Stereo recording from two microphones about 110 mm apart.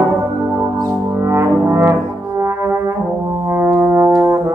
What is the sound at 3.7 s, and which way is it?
Brass instrument, 20° right (ahead or behind).